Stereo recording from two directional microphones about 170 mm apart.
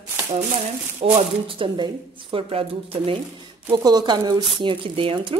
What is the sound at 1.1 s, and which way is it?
Speech, 30° right (ahead or behind).